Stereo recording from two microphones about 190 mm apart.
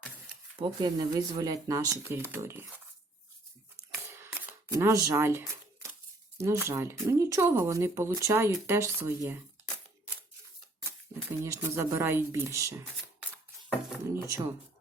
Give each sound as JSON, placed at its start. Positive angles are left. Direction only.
{"t": 0.6, "sound": "speech", "side_deg": -20}
{"t": 4.1, "sound": "shuffling cards", "side_deg": -10}
{"t": 5.1, "sound": "a sound", "side_deg": -15}
{"t": 6.3, "sound": "speech", "side_deg": -15}
{"t": 11.3, "sound": "speech", "side_deg": -15}
{"t": 14.0, "sound": "speech", "side_deg": -15}